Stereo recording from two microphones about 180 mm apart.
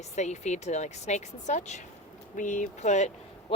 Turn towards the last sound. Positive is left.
turn(degrees=40)  # may be behind; listen again after turning